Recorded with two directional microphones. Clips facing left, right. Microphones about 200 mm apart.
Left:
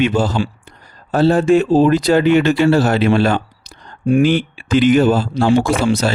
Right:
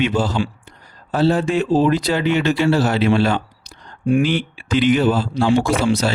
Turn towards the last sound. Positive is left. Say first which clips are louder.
# left 2 dB
turn(degrees=50)  # may be behind; listen again after turning